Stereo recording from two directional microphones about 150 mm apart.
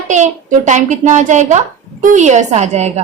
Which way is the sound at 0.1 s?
55° right (ahead or behind).